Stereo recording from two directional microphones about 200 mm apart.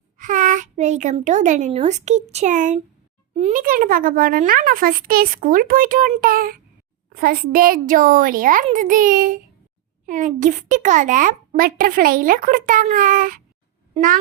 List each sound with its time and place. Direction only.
0.2 s a child's voice: 40° right (ahead or behind)